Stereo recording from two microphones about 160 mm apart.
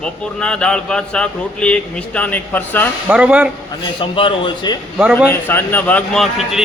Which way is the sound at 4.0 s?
35° left (ahead or behind).